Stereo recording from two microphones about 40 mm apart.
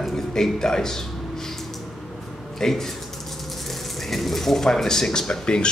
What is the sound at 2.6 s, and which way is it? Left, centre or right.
Speech, centre.